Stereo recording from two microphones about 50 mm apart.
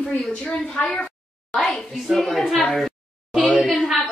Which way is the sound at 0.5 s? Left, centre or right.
Left.